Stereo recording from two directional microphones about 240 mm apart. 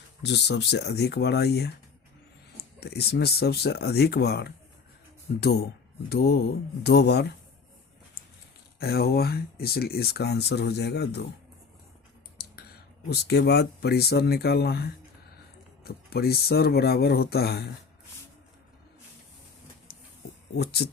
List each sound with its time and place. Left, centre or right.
0.2 s speech: left
2.8 s speech: left
8.8 s speech: left
13.1 s speech: left
19.9 s a sound: left
20.6 s speech: left